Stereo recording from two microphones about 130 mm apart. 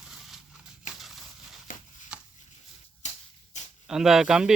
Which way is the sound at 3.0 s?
65° left (ahead or behind).